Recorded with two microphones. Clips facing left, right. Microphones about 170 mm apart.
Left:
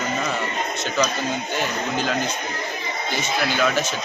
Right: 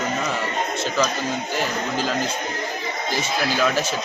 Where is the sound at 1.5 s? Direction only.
Centre (ahead or behind).